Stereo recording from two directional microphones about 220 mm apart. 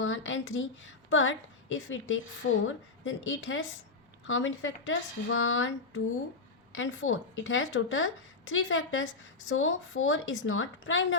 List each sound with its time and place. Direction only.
0.0 s a woman's voice: 60° left (ahead or behind)